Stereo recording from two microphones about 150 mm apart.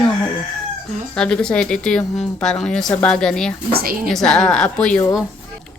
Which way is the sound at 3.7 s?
75° right (ahead or behind).